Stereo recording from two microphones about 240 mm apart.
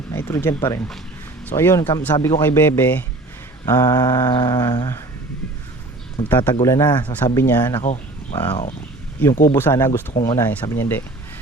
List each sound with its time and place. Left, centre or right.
0.1 s speech: centre
1.5 s mantra: centre
6.2 s mantra: centre
7.0 s speech: centre
7.3 s mantra: centre
7.8 s speech: left
9.5 s mantra: centre